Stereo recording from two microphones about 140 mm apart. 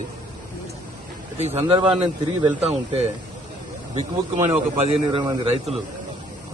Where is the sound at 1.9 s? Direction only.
40° right (ahead or behind).